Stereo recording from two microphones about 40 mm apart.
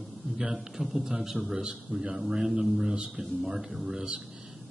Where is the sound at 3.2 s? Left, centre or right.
Centre.